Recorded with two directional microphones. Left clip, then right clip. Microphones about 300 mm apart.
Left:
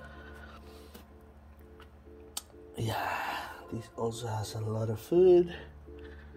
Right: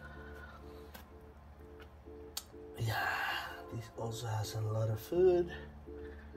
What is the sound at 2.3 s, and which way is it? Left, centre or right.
Music, left.